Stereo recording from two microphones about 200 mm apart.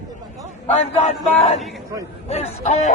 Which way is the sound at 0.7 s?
35° left (ahead or behind).